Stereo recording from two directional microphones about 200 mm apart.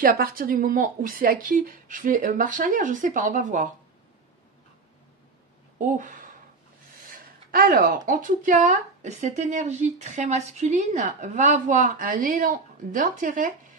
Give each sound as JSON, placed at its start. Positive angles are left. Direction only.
{"t": 0.0, "sound": "speech", "side_deg": -45}
{"t": 5.8, "sound": "speech", "side_deg": -40}